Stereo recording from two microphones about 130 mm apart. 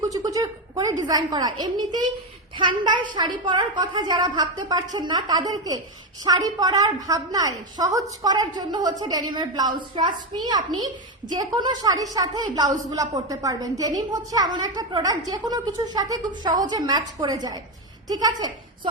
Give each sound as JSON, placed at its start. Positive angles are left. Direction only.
{"t": 0.1, "sound": "a woman's voice", "side_deg": -25}